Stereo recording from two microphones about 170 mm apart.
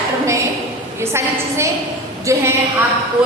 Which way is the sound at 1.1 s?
15° right (ahead or behind).